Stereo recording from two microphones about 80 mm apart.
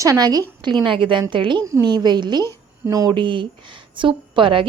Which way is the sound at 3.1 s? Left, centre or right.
Right.